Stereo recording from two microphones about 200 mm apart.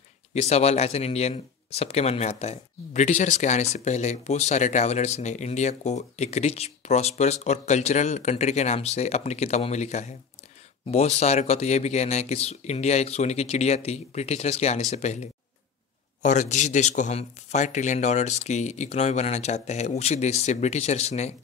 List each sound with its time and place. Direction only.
0.3 s speech: 35° left (ahead or behind)
16.2 s speech: 35° left (ahead or behind)